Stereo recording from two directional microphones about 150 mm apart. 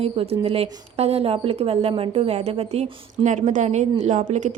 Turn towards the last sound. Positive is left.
turn(degrees=-55)  # may be behind; listen again after turning